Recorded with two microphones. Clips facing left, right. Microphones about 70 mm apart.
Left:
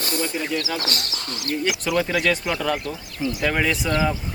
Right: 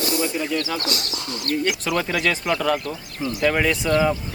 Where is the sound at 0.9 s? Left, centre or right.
Left.